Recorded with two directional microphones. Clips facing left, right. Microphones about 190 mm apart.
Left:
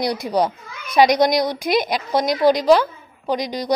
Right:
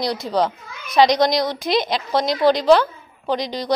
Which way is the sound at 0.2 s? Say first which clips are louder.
Left 1 dB; 10° left (ahead or behind).